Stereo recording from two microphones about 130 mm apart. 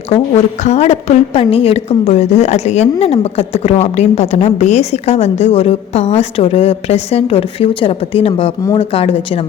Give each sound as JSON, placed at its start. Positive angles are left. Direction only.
{"t": 0.6, "sound": "a woman's voice", "side_deg": 55}